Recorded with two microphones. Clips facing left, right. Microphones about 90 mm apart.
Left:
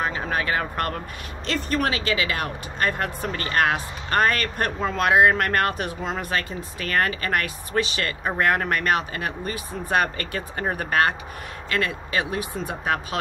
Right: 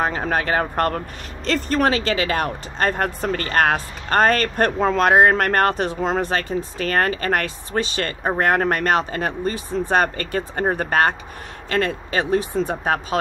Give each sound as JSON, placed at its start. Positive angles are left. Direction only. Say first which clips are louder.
{"t": 0.0, "sound": "speech", "louder": "right 4 dB", "side_deg": -40}